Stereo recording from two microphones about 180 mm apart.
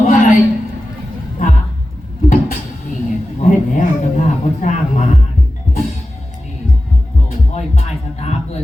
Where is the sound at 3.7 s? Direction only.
45° left (ahead or behind).